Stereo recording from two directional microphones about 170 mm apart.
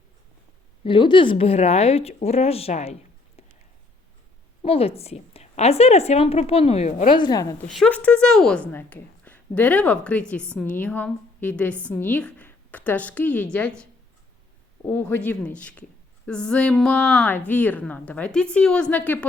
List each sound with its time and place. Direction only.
0.9 s speech: 30° left (ahead or behind)
4.6 s speech: 35° left (ahead or behind)
7.1 s a woman's voice: 25° left (ahead or behind)
7.7 s a woman's voice: 5° left (ahead or behind)
14.8 s a woman's voice: 10° left (ahead or behind)